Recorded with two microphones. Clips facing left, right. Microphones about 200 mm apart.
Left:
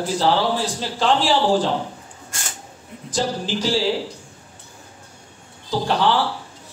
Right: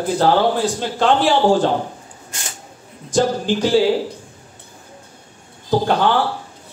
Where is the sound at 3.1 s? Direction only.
55° right (ahead or behind).